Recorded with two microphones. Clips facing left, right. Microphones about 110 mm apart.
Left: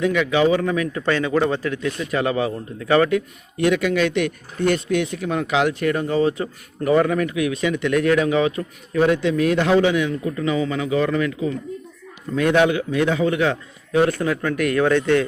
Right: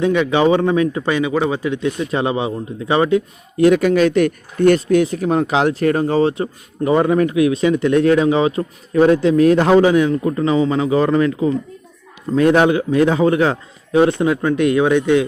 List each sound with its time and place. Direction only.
0.0 s speech: 30° right (ahead or behind)
1.0 s speech: 15° right (ahead or behind)
1.7 s speech: 25° right (ahead or behind)
14.0 s speech: 20° right (ahead or behind)